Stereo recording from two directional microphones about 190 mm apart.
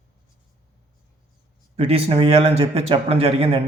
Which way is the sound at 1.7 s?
30° right (ahead or behind).